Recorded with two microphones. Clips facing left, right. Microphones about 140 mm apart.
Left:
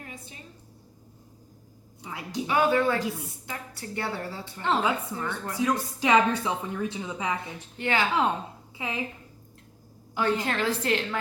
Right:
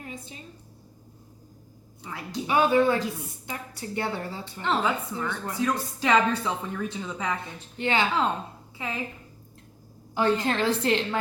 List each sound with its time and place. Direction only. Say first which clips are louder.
0.0 s a sound: right 4 dB; 20° right (ahead or behind)
2.0 s a woman's voice: even; 15° left (ahead or behind)
2.5 s a woman's voice: right 2 dB; 20° right (ahead or behind)
4.6 s speech: even; 15° left (ahead or behind)
7.8 s a woman's voice: right 2 dB; 25° right (ahead or behind)
8.8 s speech: even; 15° left (ahead or behind)
10.2 s a woman's voice: right 2 dB; 25° right (ahead or behind)